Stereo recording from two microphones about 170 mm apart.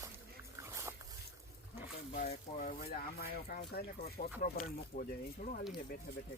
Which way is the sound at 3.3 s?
65° left (ahead or behind).